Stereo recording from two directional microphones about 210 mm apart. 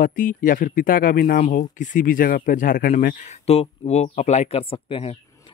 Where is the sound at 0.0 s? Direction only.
40° left (ahead or behind).